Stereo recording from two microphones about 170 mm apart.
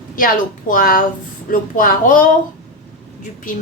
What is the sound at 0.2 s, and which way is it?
A woman's voice, 55° left (ahead or behind).